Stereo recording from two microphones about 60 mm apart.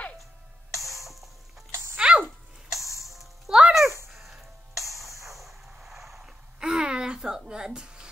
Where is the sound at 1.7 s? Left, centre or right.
Right.